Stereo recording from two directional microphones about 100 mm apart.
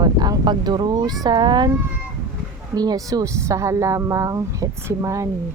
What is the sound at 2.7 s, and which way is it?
Speech, 40° right (ahead or behind).